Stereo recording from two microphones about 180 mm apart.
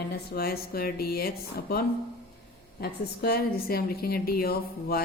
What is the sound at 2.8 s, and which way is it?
A woman's voice, 60° left (ahead or behind).